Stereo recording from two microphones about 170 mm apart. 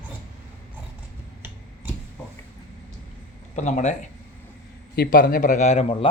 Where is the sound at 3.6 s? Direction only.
45° left (ahead or behind).